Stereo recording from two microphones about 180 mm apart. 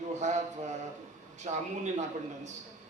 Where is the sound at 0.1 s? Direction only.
40° right (ahead or behind).